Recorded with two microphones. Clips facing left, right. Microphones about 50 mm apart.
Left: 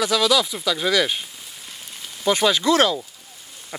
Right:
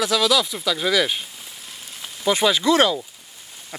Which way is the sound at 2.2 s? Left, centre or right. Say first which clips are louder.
Even; centre.